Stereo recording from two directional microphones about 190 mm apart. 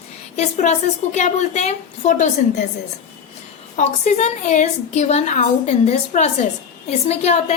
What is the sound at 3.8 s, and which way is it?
A woman's voice, 40° left (ahead or behind).